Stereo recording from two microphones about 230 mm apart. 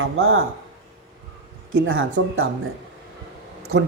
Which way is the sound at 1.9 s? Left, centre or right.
Right.